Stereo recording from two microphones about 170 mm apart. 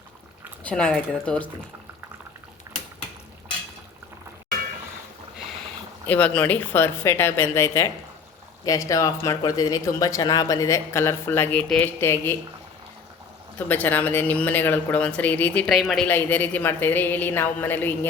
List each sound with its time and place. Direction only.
0.6 s speech: 5° left (ahead or behind)
2.7 s a sound: 15° right (ahead or behind)
6.1 s speech: 10° left (ahead or behind)
13.6 s speech: 10° left (ahead or behind)
16.0 s speech: 10° left (ahead or behind)